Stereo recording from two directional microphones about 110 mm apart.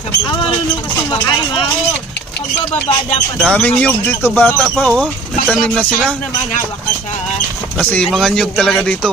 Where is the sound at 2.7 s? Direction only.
65° left (ahead or behind).